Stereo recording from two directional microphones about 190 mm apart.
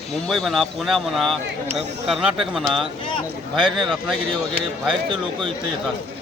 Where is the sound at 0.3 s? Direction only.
Centre (ahead or behind).